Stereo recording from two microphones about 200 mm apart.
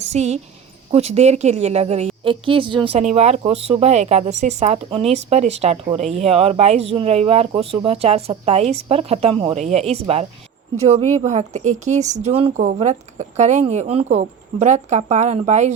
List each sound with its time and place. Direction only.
0.0 s a woman's voice: 35° right (ahead or behind)